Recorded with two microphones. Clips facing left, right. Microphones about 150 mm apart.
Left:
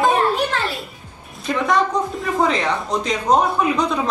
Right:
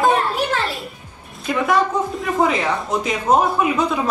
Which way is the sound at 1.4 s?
5° right (ahead or behind).